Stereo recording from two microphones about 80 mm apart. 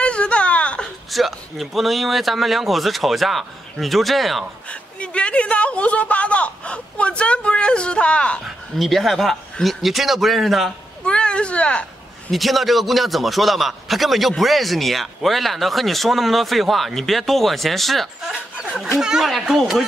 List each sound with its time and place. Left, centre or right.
0.0 s whimper: centre
1.1 s a man's voice: centre
5.0 s speech: centre
8.7 s a man's voice: centre
11.1 s speech: centre
12.3 s a man's voice: centre